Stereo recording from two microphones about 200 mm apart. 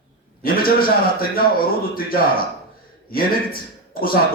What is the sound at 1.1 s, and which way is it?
A man's voice, 45° left (ahead or behind).